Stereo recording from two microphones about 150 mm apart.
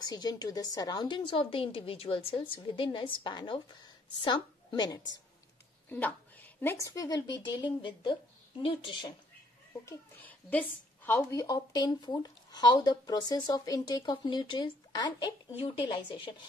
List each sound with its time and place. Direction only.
0.0 s a woman's voice: 25° left (ahead or behind)
5.9 s a woman's voice: 10° left (ahead or behind); by 9.1 s 35° left (ahead or behind)
9.8 s a woman's voice: 10° left (ahead or behind); by 16.4 s 35° left (ahead or behind)